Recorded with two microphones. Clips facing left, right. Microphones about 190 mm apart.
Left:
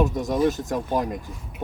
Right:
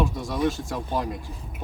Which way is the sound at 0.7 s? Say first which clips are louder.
Left 4 dB; 15° left (ahead or behind).